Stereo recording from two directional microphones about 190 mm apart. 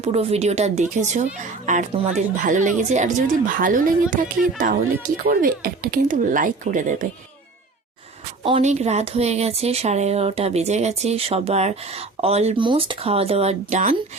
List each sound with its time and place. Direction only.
0.0 s speech: 35° right (ahead or behind)
8.4 s speech: 35° right (ahead or behind)